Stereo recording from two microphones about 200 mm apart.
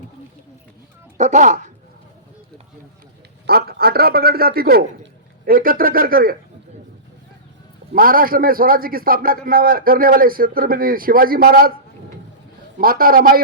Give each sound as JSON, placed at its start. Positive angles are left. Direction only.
{"t": 1.2, "sound": "speech", "side_deg": -35}
{"t": 3.4, "sound": "a man's voice", "side_deg": -50}
{"t": 7.9, "sound": "a man's voice", "side_deg": -45}
{"t": 12.8, "sound": "a man's voice", "side_deg": -45}